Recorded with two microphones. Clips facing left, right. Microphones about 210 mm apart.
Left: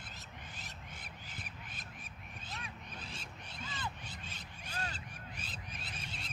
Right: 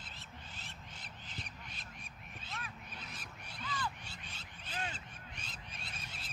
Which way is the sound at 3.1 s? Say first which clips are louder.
Left 2 dB; 25° left (ahead or behind).